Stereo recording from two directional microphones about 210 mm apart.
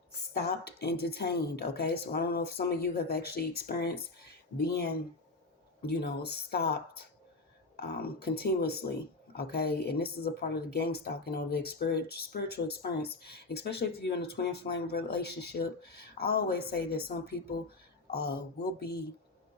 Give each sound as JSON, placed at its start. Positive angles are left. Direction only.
{"t": 0.3, "sound": "speech", "side_deg": 50}